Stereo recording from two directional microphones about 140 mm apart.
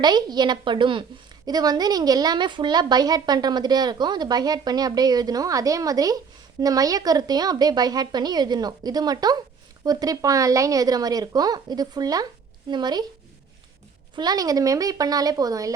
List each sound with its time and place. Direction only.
0.0 s a woman's voice: 30° right (ahead or behind)
14.2 s a woman's voice: 25° right (ahead or behind)